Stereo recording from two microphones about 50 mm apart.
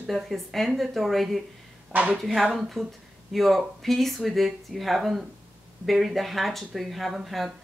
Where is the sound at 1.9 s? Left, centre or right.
Right.